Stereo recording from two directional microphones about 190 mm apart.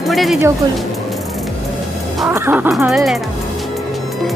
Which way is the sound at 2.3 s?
10° right (ahead or behind).